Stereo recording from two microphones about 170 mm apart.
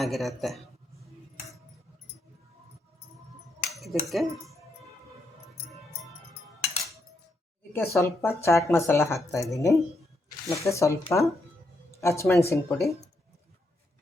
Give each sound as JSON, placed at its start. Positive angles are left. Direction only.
{"t": 0.0, "sound": "speech", "side_deg": 0}
{"t": 3.7, "sound": "cutlery", "side_deg": 0}
{"t": 7.7, "sound": "speech", "side_deg": 15}